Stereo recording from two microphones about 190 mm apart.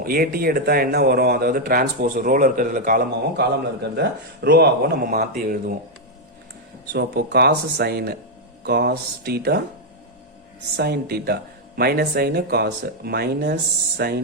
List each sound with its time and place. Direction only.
0.0 s speech: 50° right (ahead or behind)
6.9 s speech: 60° right (ahead or behind)
10.8 s speech: 55° right (ahead or behind)